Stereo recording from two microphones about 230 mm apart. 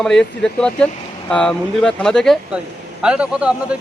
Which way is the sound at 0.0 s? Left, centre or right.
Centre.